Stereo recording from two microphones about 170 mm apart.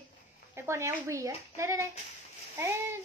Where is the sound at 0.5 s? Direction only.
15° right (ahead or behind).